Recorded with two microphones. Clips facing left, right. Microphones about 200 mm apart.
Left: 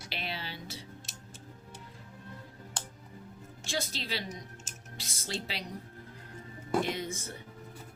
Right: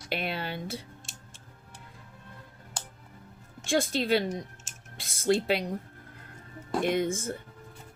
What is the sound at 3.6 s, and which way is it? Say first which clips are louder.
Speech: right 10 dB; 55° right (ahead or behind).